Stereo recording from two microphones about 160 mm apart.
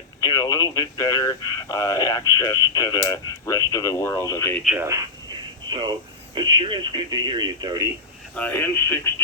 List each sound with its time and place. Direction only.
0.2 s speech: 20° left (ahead or behind)
4.8 s telephone: 20° right (ahead or behind)
6.3 s speech: 30° right (ahead or behind)
8.4 s speech: 10° left (ahead or behind)